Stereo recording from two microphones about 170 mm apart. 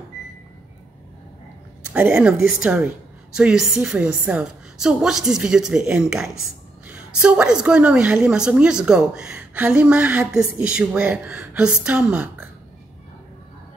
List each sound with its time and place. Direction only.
2.0 s a woman's voice: 5° right (ahead or behind)